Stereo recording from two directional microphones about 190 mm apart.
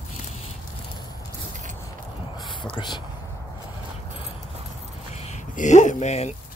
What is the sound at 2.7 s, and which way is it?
Speech, 25° left (ahead or behind).